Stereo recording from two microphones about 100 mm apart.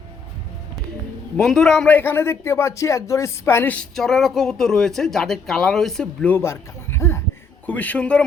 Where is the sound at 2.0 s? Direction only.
20° left (ahead or behind).